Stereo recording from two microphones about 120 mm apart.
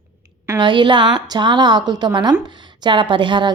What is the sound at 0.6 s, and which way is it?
A woman's voice, 40° right (ahead or behind).